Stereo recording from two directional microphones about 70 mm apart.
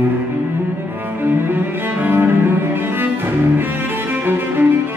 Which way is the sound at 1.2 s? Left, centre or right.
Right.